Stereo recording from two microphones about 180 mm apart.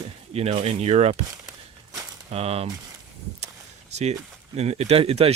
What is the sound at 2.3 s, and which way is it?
Speech, 35° right (ahead or behind).